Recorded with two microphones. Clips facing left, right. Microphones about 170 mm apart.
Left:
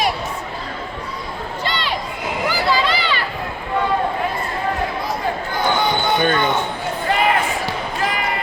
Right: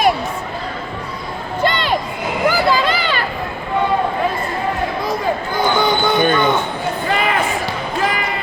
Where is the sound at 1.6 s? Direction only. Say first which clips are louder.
Right 7 dB; 50° right (ahead or behind).